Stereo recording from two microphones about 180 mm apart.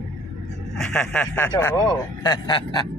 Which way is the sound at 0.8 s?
5° left (ahead or behind).